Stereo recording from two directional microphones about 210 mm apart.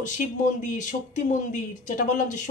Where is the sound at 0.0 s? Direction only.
35° left (ahead or behind).